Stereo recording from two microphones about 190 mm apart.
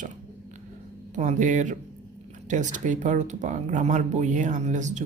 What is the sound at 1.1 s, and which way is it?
Speech, 40° right (ahead or behind).